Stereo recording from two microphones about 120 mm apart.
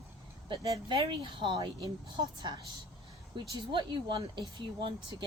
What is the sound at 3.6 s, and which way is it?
Speech, 40° right (ahead or behind).